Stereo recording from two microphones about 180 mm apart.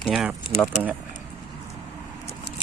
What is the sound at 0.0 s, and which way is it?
Speech, 5° right (ahead or behind).